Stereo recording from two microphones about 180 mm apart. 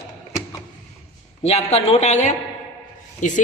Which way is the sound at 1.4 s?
35° left (ahead or behind).